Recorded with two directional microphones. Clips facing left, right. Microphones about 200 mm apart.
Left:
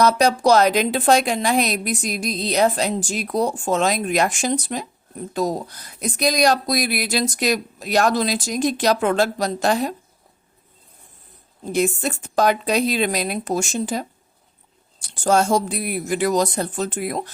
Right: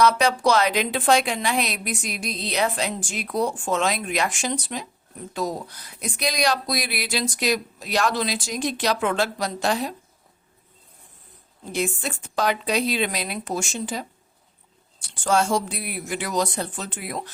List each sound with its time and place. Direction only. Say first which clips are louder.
0.0 s a woman's voice: left 3 dB; 40° left (ahead or behind)
11.6 s a woman's voice: left 6 dB; 45° left (ahead or behind)